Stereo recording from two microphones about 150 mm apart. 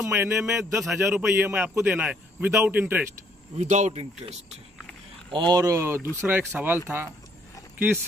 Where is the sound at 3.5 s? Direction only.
50° right (ahead or behind).